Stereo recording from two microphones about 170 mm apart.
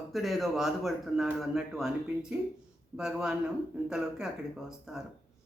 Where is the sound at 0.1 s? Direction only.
Centre (ahead or behind).